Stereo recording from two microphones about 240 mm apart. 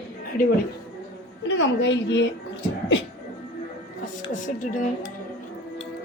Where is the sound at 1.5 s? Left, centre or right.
Left.